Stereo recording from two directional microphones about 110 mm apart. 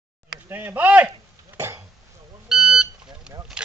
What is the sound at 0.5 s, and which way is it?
Speech, 15° right (ahead or behind).